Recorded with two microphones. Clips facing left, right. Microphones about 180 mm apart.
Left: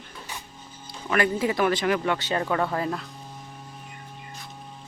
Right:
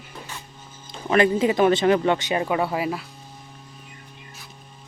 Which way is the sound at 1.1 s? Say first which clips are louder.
Right 5 dB; 20° right (ahead or behind).